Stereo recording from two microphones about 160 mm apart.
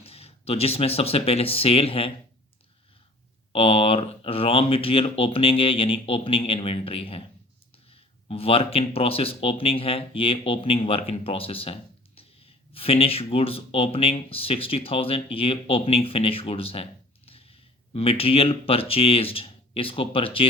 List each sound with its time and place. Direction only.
0.0 s speech: 40° left (ahead or behind)
3.5 s speech: 35° left (ahead or behind)